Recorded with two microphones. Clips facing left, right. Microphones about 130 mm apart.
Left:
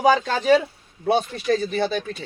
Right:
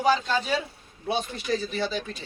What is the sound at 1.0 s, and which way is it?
Speech, 60° left (ahead or behind).